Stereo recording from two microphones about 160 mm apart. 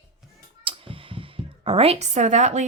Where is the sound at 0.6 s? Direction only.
35° right (ahead or behind).